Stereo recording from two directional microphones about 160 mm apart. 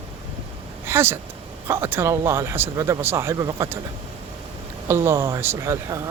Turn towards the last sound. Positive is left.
turn(degrees=-20)  # may be behind; listen again after turning